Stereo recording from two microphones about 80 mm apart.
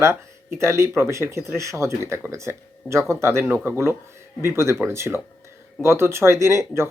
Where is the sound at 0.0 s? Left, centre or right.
Right.